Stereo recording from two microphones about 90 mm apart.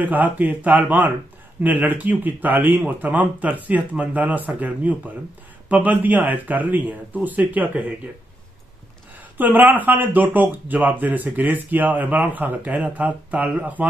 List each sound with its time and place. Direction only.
0.0 s a man's voice: 20° right (ahead or behind)
9.4 s a man's voice: 20° right (ahead or behind)